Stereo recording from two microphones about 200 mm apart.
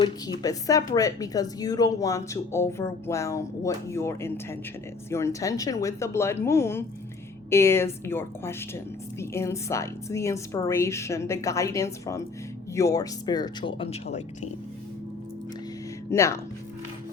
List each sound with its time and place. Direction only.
0.0 s speech: 15° left (ahead or behind)
16.0 s speech: 15° left (ahead or behind)